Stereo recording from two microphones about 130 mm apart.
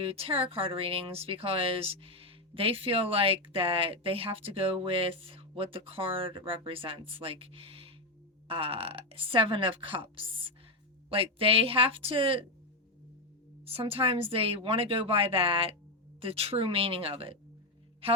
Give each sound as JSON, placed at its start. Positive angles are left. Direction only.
{"t": 0.0, "sound": "speech", "side_deg": -50}
{"t": 13.7, "sound": "speech", "side_deg": -45}